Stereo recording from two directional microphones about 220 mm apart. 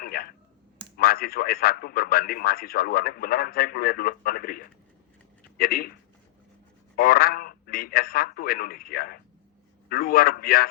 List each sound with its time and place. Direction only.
0.0 s clicking: 40° left (ahead or behind)
0.9 s a man's voice: 40° left (ahead or behind)
6.9 s speech: 40° left (ahead or behind)